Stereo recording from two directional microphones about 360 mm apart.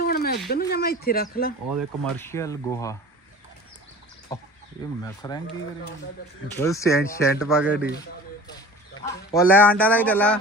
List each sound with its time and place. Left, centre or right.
0.0 s a sound: left
1.7 s speech: centre
5.0 s speech: centre
6.7 s speech: centre
9.0 s speech: centre